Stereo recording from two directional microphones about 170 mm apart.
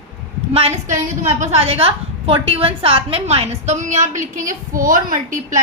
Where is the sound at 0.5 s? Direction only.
35° right (ahead or behind).